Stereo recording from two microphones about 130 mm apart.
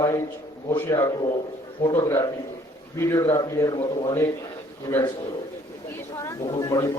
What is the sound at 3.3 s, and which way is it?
A man's voice, 25° left (ahead or behind).